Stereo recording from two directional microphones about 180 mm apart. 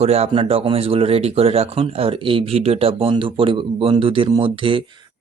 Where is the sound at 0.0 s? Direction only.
35° right (ahead or behind).